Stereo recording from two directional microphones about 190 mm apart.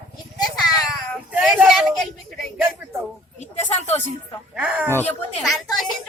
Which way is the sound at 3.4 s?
35° left (ahead or behind).